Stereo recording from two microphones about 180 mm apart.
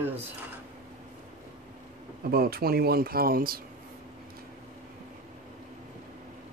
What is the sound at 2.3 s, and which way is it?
Speech, 55° right (ahead or behind).